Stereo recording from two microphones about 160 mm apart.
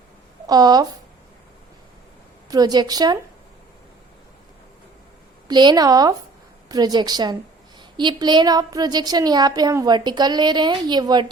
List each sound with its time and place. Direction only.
0.4 s speech: 25° right (ahead or behind)
2.5 s a woman's voice: 25° right (ahead or behind)
5.5 s a woman's voice: 25° right (ahead or behind)